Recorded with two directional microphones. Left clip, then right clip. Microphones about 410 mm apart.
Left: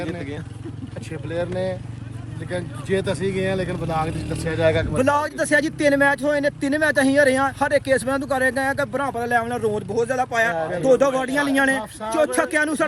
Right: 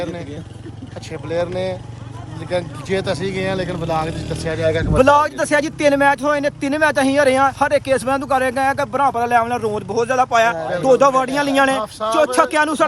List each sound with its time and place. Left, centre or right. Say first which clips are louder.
1.1 s speech: right 5 dB; centre